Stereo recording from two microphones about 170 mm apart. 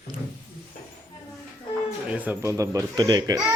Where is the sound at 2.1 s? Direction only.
10° right (ahead or behind).